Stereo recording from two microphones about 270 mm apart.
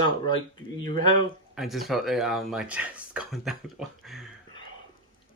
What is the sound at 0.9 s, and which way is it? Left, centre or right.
Speech, centre.